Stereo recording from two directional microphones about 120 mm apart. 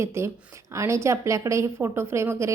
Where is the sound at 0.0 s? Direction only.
25° right (ahead or behind).